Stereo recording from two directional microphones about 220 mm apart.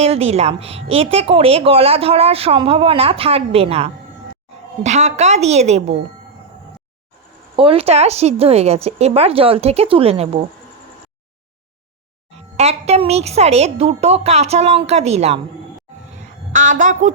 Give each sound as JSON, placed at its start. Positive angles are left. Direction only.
{"t": 0.0, "sound": "a woman's voice", "side_deg": -30}
{"t": 7.5, "sound": "speech", "side_deg": -25}
{"t": 12.3, "sound": "speech", "side_deg": -30}
{"t": 16.5, "sound": "a woman's voice", "side_deg": -35}